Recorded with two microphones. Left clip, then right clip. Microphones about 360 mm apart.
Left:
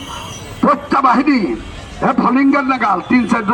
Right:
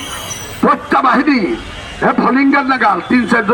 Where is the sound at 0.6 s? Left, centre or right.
Centre.